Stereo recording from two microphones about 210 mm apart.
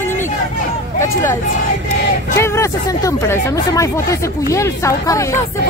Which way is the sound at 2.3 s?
15° left (ahead or behind).